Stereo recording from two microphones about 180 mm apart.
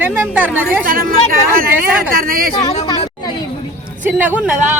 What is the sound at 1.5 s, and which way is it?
Speech, 55° right (ahead or behind).